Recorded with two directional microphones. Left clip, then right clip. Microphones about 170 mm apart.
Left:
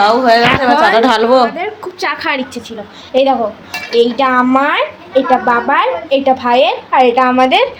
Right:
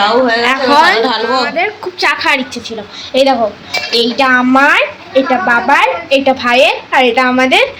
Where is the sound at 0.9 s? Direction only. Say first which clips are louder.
Left 3 dB; 65° left (ahead or behind).